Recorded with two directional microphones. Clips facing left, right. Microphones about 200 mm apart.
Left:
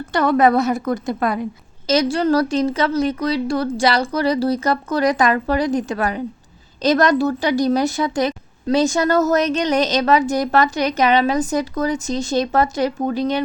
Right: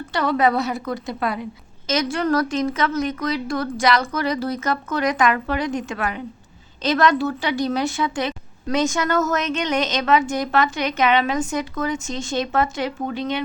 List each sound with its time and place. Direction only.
0.1 s a woman's voice: 50° left (ahead or behind)
1.9 s a woman's voice: 35° left (ahead or behind)